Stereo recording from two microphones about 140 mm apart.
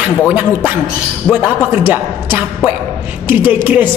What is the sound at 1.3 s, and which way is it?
A woman's voice, 15° right (ahead or behind).